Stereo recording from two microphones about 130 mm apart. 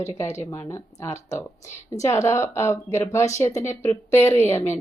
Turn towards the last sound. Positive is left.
turn(degrees=20)  # may be behind; listen again after turning